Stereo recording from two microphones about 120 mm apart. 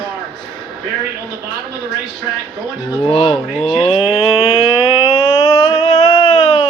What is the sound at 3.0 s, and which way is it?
Speech, 45° left (ahead or behind).